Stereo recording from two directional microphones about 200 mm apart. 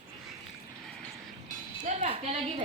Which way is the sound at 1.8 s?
35° right (ahead or behind).